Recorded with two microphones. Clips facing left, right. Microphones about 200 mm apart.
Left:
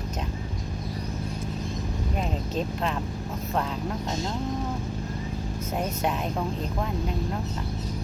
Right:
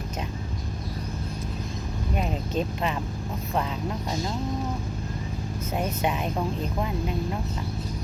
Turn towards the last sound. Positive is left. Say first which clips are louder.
# right 1 dB
turn(degrees=-5)  # may be behind; listen again after turning